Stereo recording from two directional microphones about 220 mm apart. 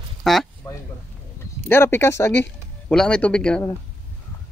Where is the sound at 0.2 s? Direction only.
Centre (ahead or behind).